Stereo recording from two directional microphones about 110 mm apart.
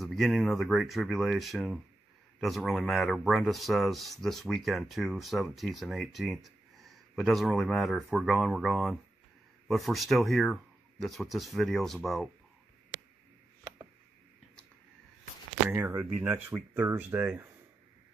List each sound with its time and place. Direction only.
0.0 s speech: centre (ahead or behind)
15.7 s speech: 25° right (ahead or behind)